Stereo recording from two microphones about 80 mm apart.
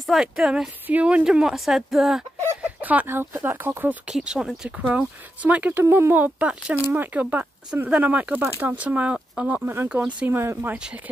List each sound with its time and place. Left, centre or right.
0.0 s speech: centre
0.8 s speech: centre
2.6 s speech: centre
4.1 s speech: centre
10.3 s speech: right